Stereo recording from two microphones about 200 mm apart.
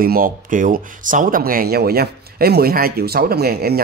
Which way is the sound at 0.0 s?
45° right (ahead or behind).